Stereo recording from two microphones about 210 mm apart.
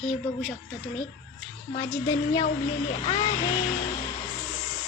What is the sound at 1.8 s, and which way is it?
Speech, 10° left (ahead or behind).